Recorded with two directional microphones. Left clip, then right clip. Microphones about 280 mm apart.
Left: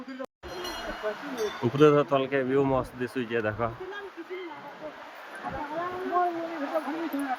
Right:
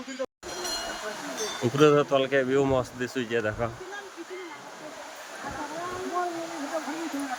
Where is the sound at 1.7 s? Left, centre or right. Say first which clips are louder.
Right 1 dB; centre.